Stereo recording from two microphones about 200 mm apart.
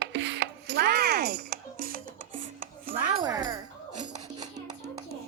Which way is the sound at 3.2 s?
20° right (ahead or behind).